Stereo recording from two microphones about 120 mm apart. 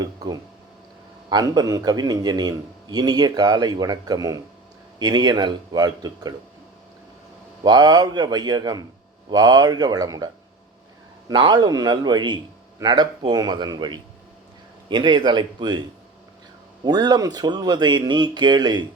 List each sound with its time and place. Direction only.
1.3 s a man's voice: 35° right (ahead or behind)
7.6 s a man's voice: 35° right (ahead or behind)
11.3 s a man's voice: 35° right (ahead or behind)
16.8 s a man's voice: 35° right (ahead or behind)